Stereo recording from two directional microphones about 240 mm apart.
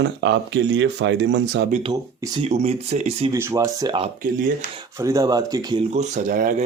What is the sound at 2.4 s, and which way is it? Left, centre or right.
Speech, right.